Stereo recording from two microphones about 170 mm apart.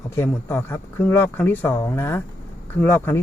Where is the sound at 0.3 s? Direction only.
10° left (ahead or behind).